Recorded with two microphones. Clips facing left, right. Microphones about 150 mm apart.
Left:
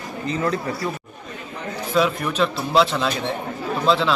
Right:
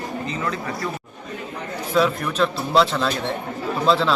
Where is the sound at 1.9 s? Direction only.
5° left (ahead or behind).